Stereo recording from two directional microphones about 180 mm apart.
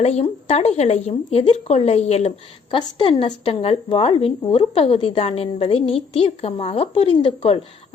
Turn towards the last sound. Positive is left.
turn(degrees=35)  # may be behind; listen again after turning